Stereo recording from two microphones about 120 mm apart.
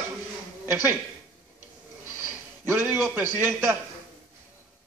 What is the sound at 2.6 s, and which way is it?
A man's voice, 20° right (ahead or behind).